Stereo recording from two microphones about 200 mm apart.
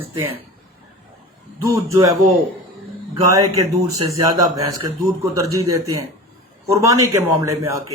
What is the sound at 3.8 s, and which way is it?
Speech, 15° right (ahead or behind).